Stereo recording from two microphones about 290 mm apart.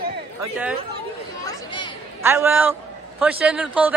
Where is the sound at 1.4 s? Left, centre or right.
Centre.